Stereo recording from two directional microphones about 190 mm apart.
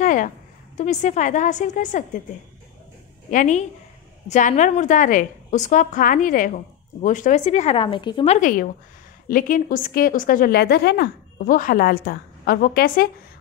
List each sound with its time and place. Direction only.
0.0 s a sound: 45° left (ahead or behind)
0.7 s a woman's voice: 40° left (ahead or behind)
3.3 s a woman's voice: 40° left (ahead or behind); by 8.4 s 25° left (ahead or behind)
8.4 s a woman's voice: 45° left (ahead or behind)